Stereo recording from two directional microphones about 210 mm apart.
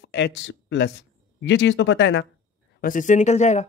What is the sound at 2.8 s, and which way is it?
Speech, 40° left (ahead or behind).